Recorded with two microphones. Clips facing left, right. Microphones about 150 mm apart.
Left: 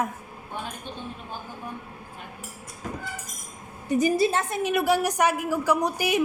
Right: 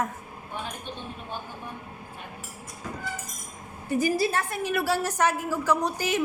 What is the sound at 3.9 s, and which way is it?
A woman's voice, 20° left (ahead or behind).